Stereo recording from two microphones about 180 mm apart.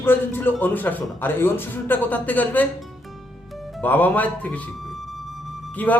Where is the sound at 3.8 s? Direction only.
10° left (ahead or behind).